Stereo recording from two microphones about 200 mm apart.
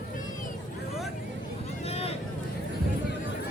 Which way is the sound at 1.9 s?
30° left (ahead or behind).